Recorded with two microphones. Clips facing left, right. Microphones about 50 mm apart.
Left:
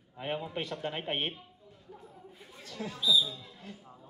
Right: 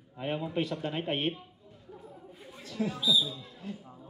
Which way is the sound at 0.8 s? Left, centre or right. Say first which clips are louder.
Right 2 dB; left.